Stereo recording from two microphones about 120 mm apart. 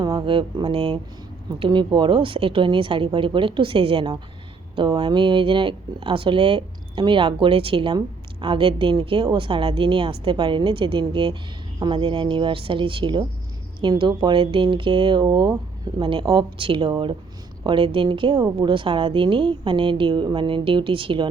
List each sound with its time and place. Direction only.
0.0 s speech: 40° right (ahead or behind)
16.0 s speech: 45° right (ahead or behind)